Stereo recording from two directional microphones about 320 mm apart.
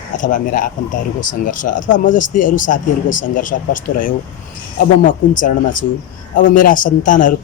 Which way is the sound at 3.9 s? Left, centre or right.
Left.